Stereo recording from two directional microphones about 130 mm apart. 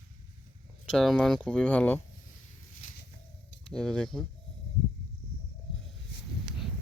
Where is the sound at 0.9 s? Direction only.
5° left (ahead or behind).